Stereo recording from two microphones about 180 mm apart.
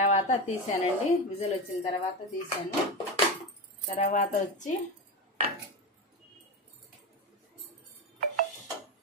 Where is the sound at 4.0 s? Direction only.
40° left (ahead or behind).